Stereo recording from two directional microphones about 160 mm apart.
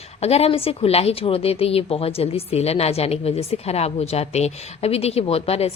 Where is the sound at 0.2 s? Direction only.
40° left (ahead or behind).